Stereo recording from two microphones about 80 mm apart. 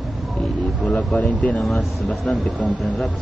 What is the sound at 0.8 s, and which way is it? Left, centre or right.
Speech, centre.